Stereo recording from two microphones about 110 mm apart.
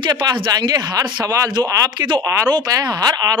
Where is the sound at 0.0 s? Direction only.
40° right (ahead or behind).